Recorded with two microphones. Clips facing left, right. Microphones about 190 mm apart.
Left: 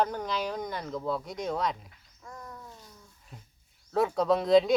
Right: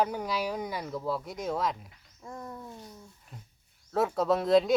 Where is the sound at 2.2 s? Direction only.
25° right (ahead or behind).